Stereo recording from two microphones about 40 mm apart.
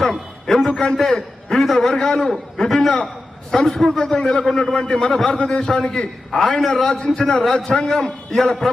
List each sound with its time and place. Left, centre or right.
0.0 s a sound: centre
1.5 s a man's voice: centre
3.9 s a man's voice: centre